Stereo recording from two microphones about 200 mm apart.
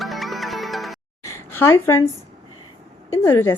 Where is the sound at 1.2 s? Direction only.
10° left (ahead or behind).